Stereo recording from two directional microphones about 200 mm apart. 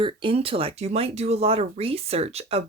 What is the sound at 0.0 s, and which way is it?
Speech, 25° right (ahead or behind).